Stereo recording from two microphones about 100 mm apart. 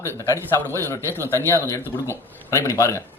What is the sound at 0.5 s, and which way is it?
A man's voice, 30° left (ahead or behind).